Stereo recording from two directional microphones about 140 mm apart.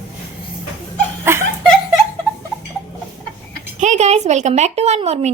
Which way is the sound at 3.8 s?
55° right (ahead or behind).